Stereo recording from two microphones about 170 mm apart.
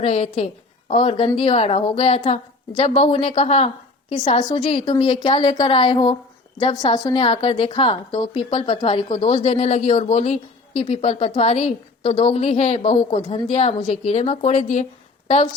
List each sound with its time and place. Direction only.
0.0 s a woman's voice: 35° left (ahead or behind)